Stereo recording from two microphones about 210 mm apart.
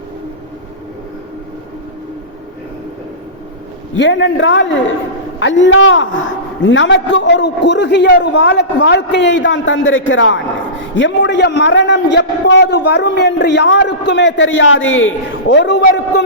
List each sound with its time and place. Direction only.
3.9 s a man's voice: 60° left (ahead or behind)